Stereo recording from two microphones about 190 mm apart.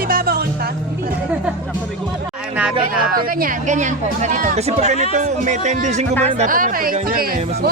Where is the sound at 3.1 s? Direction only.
50° right (ahead or behind).